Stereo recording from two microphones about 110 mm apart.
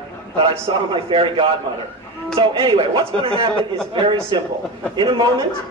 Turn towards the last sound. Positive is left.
turn(degrees=-45)  # may be behind; listen again after turning